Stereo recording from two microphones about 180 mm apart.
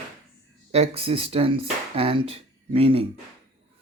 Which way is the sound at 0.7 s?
35° right (ahead or behind).